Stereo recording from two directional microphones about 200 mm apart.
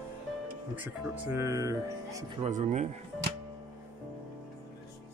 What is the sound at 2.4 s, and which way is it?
Speech, 35° right (ahead or behind).